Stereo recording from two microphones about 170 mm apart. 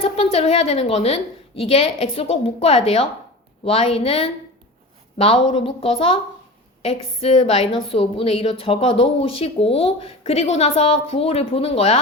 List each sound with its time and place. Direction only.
0.0 s a woman's voice: 35° left (ahead or behind)